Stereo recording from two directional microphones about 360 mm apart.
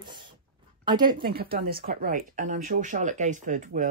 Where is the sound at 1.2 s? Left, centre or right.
Right.